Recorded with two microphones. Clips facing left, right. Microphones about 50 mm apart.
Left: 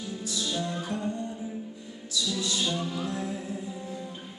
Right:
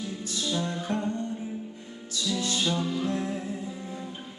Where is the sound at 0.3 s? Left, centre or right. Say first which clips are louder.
Right 1 dB; right.